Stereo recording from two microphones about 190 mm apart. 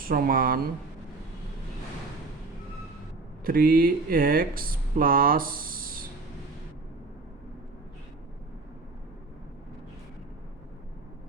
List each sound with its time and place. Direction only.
0.0 s speech: 50° right (ahead or behind)
3.4 s speech: 50° right (ahead or behind)